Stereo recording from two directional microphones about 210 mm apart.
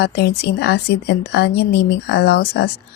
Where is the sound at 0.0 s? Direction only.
50° left (ahead or behind).